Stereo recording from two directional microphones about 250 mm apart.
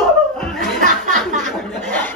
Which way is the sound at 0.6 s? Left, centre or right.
Right.